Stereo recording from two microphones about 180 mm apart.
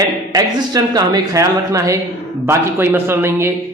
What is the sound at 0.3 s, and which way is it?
Speech, 20° right (ahead or behind).